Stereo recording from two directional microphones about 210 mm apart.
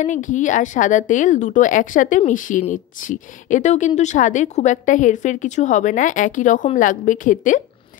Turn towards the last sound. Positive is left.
turn(degrees=40)  # may be behind; listen again after turning